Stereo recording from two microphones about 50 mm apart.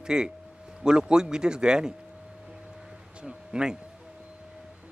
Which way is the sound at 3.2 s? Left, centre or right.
Centre.